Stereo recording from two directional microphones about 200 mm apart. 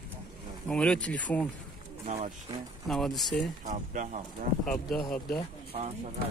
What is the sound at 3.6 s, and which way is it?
Speech, 40° right (ahead or behind).